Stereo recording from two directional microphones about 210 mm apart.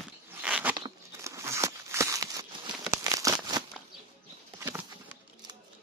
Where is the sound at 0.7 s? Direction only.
15° right (ahead or behind).